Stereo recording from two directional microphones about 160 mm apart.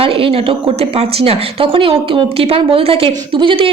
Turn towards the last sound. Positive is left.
turn(degrees=-35)  # may be behind; listen again after turning